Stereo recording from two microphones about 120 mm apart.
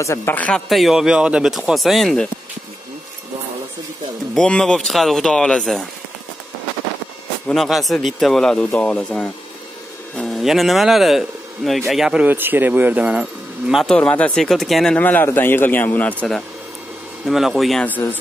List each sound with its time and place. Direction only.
0.0 s speech: 20° left (ahead or behind)
0.7 s speech: centre (ahead or behind)
4.4 s speech: 5° left (ahead or behind)
7.4 s speech: centre (ahead or behind)
10.1 s a sound: 5° left (ahead or behind)
10.4 s speech: centre (ahead or behind)
15.0 s speech: 15° left (ahead or behind)